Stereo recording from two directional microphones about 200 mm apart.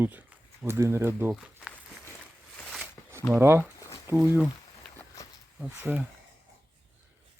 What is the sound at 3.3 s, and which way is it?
Speech, 10° right (ahead or behind).